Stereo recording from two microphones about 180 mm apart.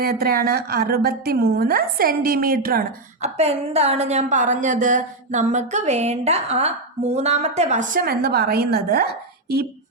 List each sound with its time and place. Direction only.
0.0 s a woman's voice: 55° right (ahead or behind)
3.2 s a woman's voice: 35° right (ahead or behind); by 9.0 s 60° right (ahead or behind)